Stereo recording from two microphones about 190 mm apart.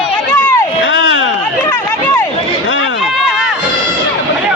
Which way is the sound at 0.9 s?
90° left.